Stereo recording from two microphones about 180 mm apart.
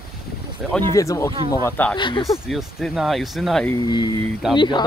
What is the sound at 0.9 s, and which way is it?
Speech, 15° left (ahead or behind).